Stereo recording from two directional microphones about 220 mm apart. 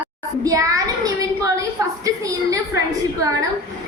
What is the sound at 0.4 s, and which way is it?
A woman's voice, 15° right (ahead or behind).